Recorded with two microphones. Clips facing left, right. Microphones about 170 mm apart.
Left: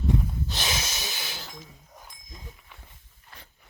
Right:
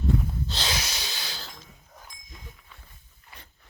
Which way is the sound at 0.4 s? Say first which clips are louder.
Even; 20° left (ahead or behind).